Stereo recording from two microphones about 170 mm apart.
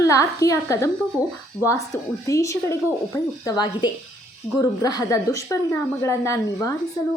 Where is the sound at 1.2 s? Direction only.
10° right (ahead or behind).